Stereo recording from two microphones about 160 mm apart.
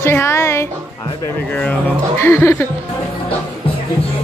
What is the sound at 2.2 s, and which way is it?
Speech, 15° left (ahead or behind).